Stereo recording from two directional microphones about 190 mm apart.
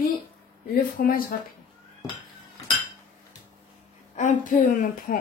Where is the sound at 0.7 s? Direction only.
50° left (ahead or behind).